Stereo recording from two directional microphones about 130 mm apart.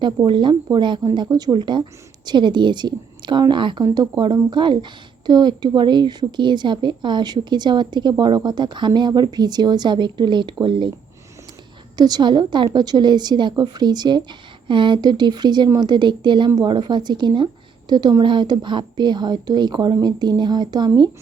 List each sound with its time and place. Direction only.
0.3 s a woman's voice: 35° right (ahead or behind)
11.9 s a woman's voice: 30° right (ahead or behind)